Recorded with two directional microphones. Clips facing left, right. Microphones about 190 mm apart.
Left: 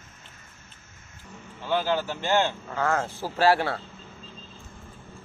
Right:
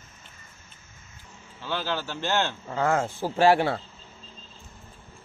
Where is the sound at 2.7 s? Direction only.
20° right (ahead or behind).